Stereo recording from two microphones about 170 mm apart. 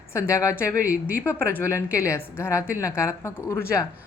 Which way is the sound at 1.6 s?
15° left (ahead or behind).